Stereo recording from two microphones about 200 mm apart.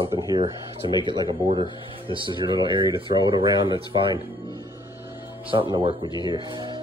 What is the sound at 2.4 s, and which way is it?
Speech, 25° right (ahead or behind).